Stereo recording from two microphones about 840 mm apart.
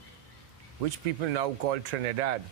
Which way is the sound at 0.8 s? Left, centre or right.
Right.